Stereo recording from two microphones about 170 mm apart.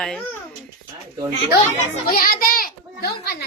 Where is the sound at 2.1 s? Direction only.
55° left (ahead or behind).